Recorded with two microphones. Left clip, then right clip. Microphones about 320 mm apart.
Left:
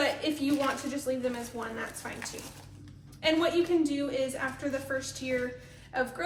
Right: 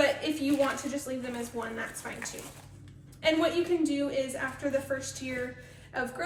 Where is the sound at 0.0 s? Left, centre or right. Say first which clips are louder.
Right 2 dB; centre.